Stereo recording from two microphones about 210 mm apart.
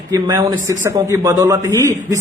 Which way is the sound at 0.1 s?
20° right (ahead or behind).